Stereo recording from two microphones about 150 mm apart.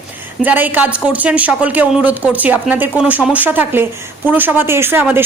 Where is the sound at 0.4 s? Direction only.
10° right (ahead or behind).